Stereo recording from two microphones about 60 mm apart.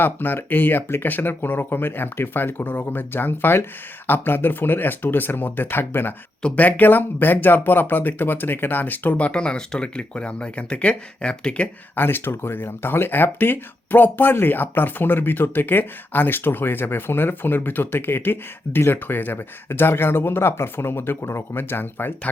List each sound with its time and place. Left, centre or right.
0.0 s speech: left; by 11.7 s centre
11.9 s speech: left